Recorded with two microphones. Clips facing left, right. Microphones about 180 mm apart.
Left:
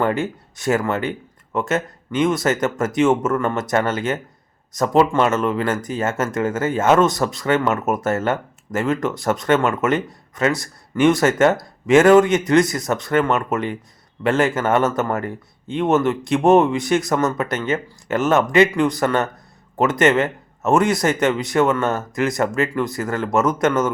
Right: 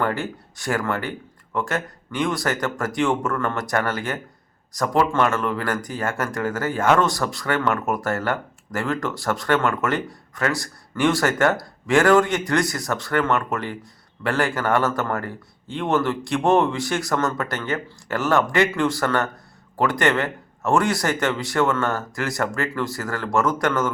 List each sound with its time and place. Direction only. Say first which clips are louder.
0.0 s speech: left 4 dB; 20° left (ahead or behind)